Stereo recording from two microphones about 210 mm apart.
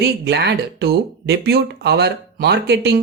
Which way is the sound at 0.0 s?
55° right (ahead or behind).